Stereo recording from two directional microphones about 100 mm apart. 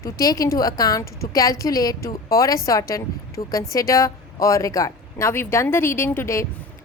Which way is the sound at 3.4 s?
65° left (ahead or behind).